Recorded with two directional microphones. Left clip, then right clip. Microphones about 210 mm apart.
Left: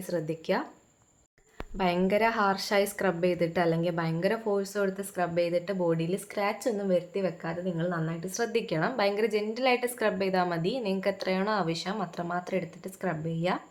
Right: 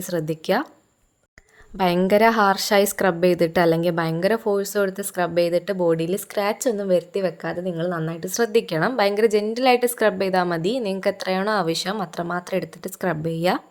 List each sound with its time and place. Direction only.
0.0 s speech: 45° right (ahead or behind)
1.8 s a woman's voice: 40° right (ahead or behind)